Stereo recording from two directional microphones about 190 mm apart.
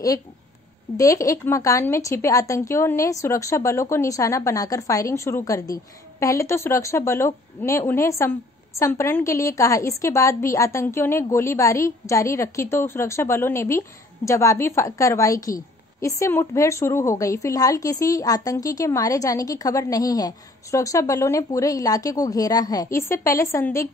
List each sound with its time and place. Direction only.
0.9 s speech: 15° left (ahead or behind)